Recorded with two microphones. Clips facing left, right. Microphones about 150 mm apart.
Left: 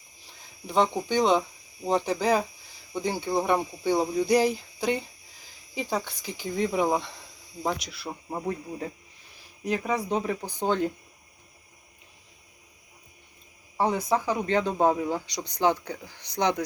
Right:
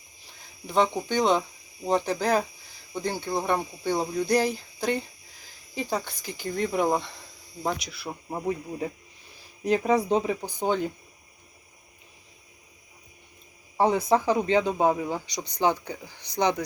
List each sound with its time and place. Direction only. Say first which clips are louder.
0.7 s speech: even; centre (ahead or behind)
9.7 s speech: right 5 dB; 30° right (ahead or behind)
10.4 s speech: even; 5° right (ahead or behind)
14.1 s speech: right 3 dB; 25° right (ahead or behind)
14.5 s speech: left 2 dB; 5° right (ahead or behind)